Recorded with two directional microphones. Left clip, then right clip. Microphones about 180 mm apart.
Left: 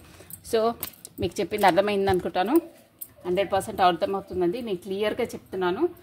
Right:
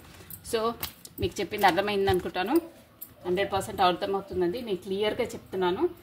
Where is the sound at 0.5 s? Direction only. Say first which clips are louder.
Left 5 dB; 45° left (ahead or behind).